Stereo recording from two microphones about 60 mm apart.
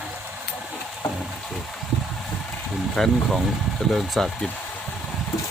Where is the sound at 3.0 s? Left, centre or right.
Centre.